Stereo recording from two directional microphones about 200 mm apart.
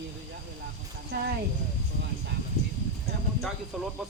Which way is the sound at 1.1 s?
55° right (ahead or behind).